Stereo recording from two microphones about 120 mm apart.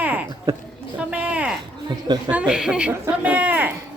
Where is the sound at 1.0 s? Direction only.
10° right (ahead or behind).